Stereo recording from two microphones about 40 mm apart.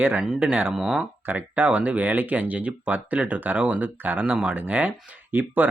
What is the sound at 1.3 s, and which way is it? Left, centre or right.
Speech, right.